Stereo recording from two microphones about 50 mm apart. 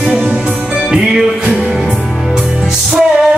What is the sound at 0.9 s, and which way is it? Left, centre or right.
Music, centre.